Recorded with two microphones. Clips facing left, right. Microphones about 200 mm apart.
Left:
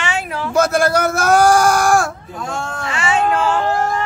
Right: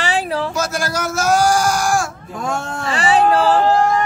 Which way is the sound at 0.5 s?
55° left (ahead or behind).